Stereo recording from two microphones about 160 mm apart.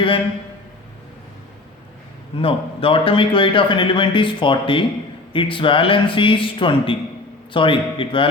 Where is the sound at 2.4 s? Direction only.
35° left (ahead or behind).